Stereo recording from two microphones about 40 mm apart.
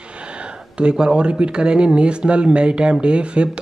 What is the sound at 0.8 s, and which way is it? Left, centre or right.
Speech, right.